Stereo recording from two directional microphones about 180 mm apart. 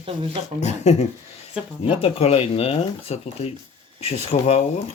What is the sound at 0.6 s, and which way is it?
Speech, 40° left (ahead or behind).